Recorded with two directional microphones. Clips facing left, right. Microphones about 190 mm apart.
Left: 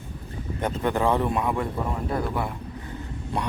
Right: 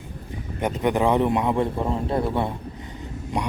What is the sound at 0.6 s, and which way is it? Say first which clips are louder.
A man's voice: right 3 dB; 15° right (ahead or behind).